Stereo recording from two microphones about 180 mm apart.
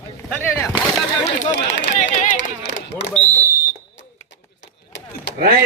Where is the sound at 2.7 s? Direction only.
85° left.